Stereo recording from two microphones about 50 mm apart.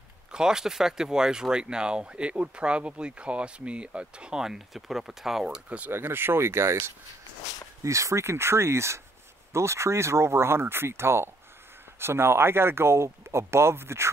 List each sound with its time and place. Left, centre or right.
0.3 s speech: centre
5.9 s speech: right
7.8 s speech: right